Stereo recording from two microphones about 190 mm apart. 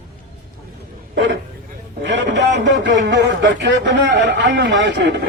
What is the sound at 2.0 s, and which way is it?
A man's voice, 70° right (ahead or behind).